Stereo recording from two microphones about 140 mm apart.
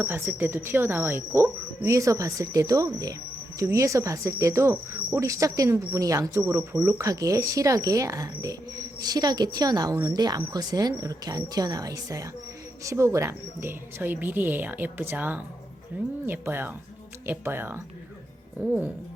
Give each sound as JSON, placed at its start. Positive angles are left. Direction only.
{"t": 0.0, "sound": "speech", "side_deg": -15}
{"t": 3.6, "sound": "cricket", "side_deg": -20}
{"t": 12.8, "sound": "speech", "side_deg": -20}